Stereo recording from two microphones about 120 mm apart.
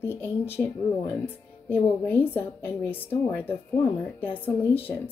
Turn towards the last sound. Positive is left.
turn(degrees=15)  # may be behind; listen again after turning